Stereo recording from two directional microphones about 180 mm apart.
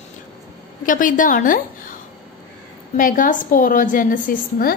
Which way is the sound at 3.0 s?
50° left (ahead or behind).